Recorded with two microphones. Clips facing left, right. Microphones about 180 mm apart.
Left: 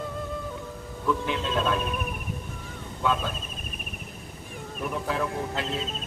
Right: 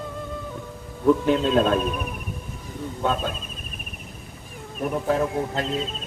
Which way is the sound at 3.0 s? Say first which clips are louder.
Right 2 dB; 45° right (ahead or behind).